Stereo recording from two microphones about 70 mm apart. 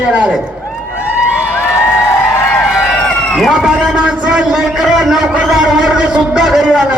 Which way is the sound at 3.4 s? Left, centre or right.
Centre.